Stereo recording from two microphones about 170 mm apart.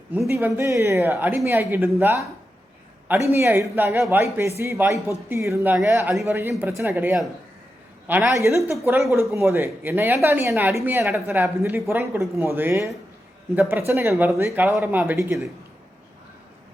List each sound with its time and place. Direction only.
0.3 s speech: 15° right (ahead or behind)
3.3 s speech: 15° right (ahead or behind)